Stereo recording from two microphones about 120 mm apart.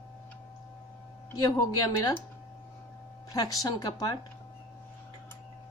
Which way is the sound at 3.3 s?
30° left (ahead or behind).